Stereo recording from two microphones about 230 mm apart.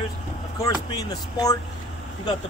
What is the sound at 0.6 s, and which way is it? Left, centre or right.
Speech, centre.